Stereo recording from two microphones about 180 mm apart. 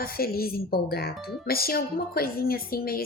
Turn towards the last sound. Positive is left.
turn(degrees=55)  # may be behind; listen again after turning